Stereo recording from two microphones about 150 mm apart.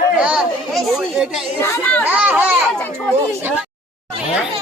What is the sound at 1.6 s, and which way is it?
Speech, 15° left (ahead or behind).